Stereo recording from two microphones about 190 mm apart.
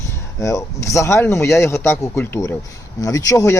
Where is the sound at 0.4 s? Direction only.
15° left (ahead or behind).